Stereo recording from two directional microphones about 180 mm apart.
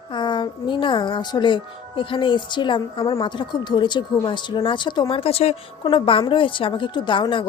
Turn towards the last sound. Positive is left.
turn(degrees=25)  # may be behind; listen again after turning